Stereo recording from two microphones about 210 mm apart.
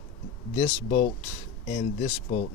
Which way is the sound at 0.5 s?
30° left (ahead or behind).